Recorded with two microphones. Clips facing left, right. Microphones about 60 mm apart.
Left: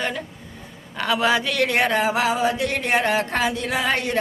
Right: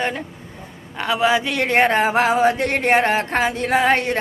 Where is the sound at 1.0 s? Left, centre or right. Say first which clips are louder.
Right 2 dB; centre.